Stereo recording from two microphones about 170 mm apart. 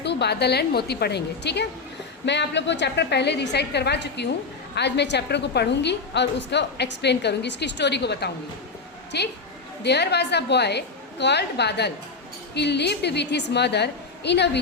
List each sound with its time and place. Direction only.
0.0 s a woman's voice: 80° left
2.2 s a woman's voice: 90° left